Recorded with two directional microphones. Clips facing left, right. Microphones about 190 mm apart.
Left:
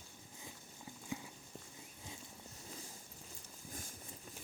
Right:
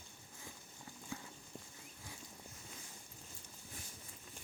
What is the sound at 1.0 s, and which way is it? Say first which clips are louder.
Clip-clop: left 3 dB; 15° left (ahead or behind).